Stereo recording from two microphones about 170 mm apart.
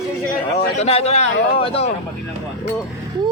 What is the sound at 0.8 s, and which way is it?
A man's voice, 35° left (ahead or behind).